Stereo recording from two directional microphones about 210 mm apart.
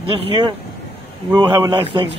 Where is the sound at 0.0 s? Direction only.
25° right (ahead or behind).